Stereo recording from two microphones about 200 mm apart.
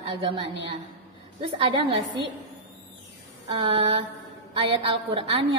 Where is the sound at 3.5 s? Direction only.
30° right (ahead or behind).